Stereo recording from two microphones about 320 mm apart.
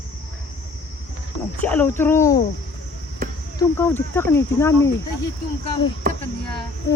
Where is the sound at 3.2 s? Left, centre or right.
Right.